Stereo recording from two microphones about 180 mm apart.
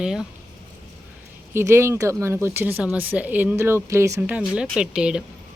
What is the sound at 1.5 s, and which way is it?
Speech, 15° right (ahead or behind).